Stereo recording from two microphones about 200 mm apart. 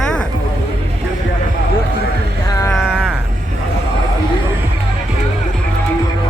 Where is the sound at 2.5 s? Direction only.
15° left (ahead or behind).